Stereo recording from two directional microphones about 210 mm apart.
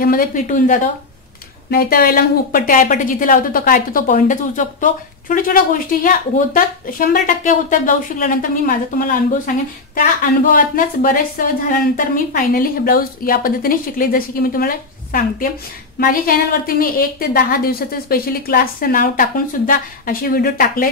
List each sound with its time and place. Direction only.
0.0 s a woman's voice: 40° left (ahead or behind)